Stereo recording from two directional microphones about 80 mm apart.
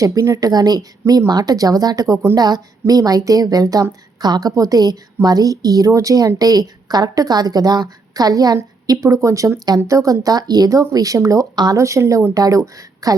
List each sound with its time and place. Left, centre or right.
0.0 s a woman's voice: right
11.5 s speech: right
11.8 s a woman's voice: right